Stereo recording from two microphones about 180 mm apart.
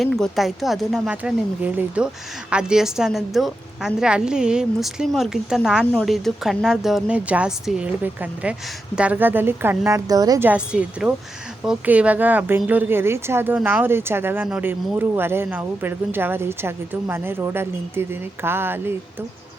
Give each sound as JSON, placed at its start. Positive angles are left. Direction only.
{"t": 0.0, "sound": "a woman's voice", "side_deg": 0}
{"t": 10.5, "sound": "a woman's voice", "side_deg": -5}